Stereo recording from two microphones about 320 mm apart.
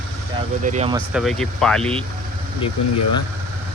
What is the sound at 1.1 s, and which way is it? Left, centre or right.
Speech, centre.